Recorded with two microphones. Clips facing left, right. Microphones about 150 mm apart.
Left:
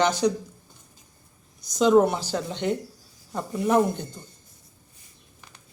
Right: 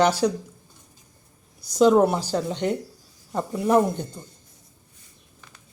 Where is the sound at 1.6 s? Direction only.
10° right (ahead or behind).